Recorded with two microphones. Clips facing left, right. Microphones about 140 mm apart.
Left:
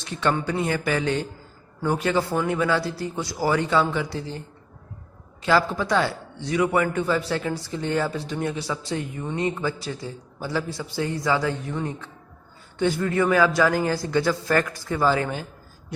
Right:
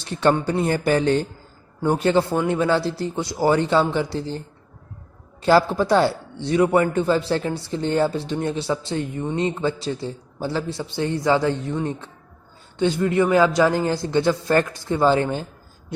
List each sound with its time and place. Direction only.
0.0 s a man's voice: 35° right (ahead or behind)
5.4 s a man's voice: 35° right (ahead or behind)